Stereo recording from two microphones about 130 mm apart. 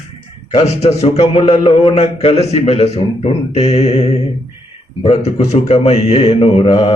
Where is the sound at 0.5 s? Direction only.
55° left (ahead or behind).